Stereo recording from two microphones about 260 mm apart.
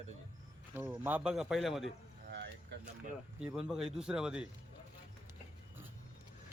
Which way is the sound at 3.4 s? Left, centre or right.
Centre.